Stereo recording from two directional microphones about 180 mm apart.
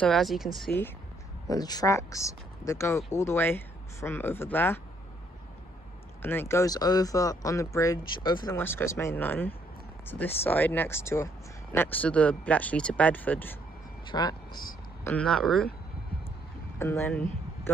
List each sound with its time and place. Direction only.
0.0 s speech: centre (ahead or behind)
1.5 s speech: 20° left (ahead or behind)
6.2 s speech: 15° left (ahead or behind)
8.5 s speech: 10° left (ahead or behind)
14.1 s speech: 20° left (ahead or behind)
15.0 s speech: 5° left (ahead or behind)
16.7 s speech: 15° left (ahead or behind)